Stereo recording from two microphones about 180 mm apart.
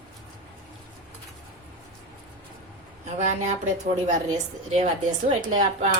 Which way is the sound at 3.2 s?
40° right (ahead or behind).